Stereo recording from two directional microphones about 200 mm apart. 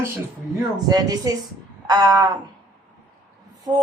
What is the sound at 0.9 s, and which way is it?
A woman's voice, 20° right (ahead or behind).